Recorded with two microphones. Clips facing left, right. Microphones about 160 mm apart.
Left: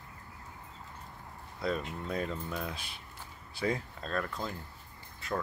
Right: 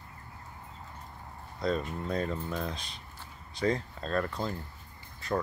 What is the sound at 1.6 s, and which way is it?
Speech, 5° left (ahead or behind).